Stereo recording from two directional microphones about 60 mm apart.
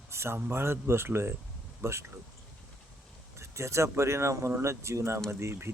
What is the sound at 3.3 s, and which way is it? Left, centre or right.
Speech, right.